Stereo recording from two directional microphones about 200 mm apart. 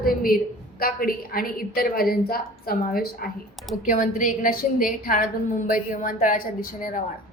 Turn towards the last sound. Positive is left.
turn(degrees=45)  # may be behind; listen again after turning